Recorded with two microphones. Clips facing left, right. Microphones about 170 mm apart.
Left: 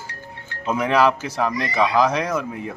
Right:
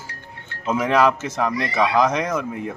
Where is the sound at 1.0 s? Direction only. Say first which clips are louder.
Left 1 dB; 10° left (ahead or behind).